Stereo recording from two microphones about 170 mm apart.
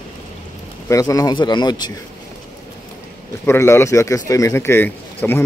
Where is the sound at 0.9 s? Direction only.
20° left (ahead or behind).